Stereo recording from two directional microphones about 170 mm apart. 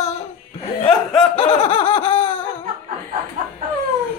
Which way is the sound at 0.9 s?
Centre (ahead or behind).